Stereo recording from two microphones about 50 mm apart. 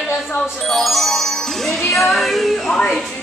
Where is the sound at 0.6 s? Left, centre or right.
Centre.